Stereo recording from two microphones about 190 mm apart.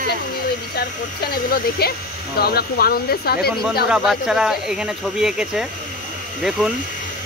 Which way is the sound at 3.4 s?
Centre (ahead or behind).